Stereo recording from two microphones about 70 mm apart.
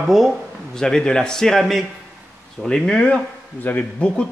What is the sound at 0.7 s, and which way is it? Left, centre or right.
A man's voice, centre.